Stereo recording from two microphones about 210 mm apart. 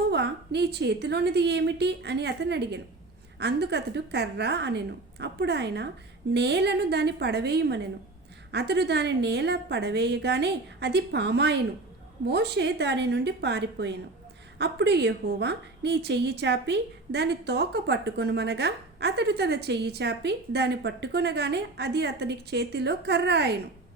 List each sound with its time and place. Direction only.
0.1 s a woman's voice: 55° right (ahead or behind)